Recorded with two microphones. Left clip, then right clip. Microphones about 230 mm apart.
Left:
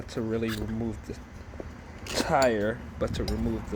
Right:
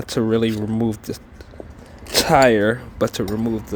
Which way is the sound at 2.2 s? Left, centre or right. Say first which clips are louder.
Right 10 dB; right.